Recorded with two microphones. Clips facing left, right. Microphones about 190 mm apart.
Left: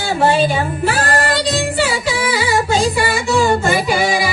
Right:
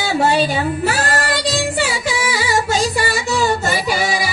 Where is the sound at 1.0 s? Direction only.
50° left (ahead or behind).